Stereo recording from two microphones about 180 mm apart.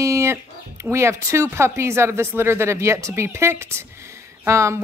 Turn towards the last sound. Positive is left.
turn(degrees=-15)  # may be behind; listen again after turning